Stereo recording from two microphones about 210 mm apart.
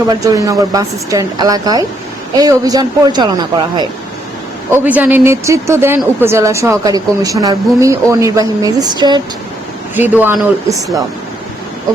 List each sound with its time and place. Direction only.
0.1 s speech: 15° right (ahead or behind)
4.7 s speech: 10° right (ahead or behind)
9.9 s speech: 10° right (ahead or behind)